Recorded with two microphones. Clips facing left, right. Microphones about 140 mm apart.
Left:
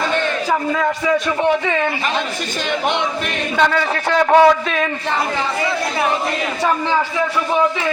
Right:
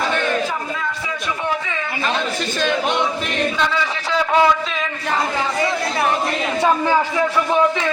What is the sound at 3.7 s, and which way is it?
A man's voice, 50° left (ahead or behind).